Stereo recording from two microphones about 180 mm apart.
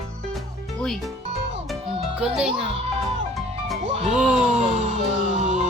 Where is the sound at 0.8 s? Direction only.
Centre (ahead or behind).